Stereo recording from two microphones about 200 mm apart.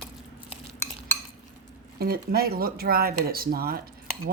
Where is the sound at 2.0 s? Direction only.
50° right (ahead or behind).